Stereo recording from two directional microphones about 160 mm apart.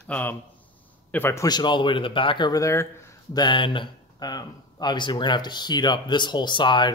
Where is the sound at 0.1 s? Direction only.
10° left (ahead or behind).